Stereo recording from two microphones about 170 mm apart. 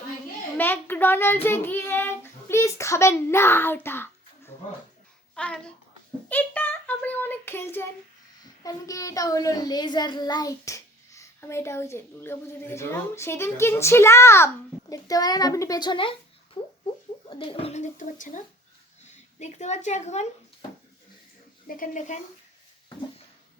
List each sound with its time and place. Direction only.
0.5 s child singing: 10° left (ahead or behind)
5.3 s a child's voice: 5° left (ahead or behind); by 16.1 s 30° left (ahead or behind)
16.6 s a sound: 30° left (ahead or behind)
17.2 s speech: 30° left (ahead or behind)
21.7 s a woman's voice: 50° left (ahead or behind)